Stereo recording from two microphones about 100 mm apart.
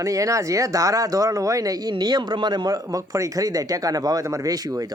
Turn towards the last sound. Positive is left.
turn(degrees=-40)  # may be behind; listen again after turning